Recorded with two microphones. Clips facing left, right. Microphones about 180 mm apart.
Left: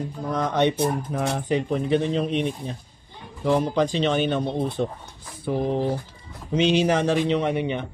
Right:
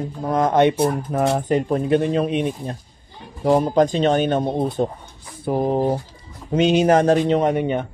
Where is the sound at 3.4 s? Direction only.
45° right (ahead or behind).